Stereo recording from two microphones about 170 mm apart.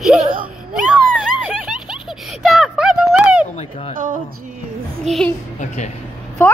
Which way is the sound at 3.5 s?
40° left (ahead or behind).